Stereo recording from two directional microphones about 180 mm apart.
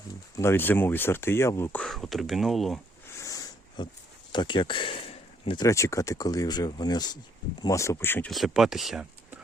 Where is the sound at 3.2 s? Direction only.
20° left (ahead or behind).